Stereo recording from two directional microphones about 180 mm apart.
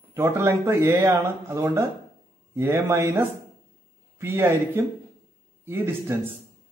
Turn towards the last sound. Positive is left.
turn(degrees=-15)  # may be behind; listen again after turning